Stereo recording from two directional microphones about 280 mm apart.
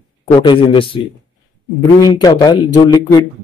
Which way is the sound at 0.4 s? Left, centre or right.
Centre.